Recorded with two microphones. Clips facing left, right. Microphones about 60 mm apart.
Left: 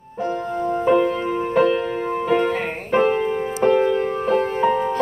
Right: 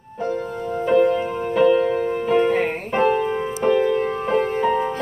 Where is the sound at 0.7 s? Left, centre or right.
Left.